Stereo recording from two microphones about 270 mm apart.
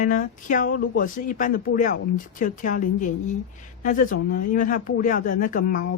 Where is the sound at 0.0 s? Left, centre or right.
Left.